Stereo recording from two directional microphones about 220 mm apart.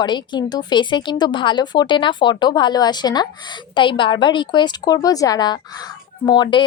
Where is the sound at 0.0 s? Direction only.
20° left (ahead or behind).